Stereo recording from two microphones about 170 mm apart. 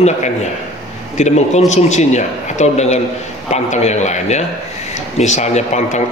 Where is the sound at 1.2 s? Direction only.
40° left (ahead or behind).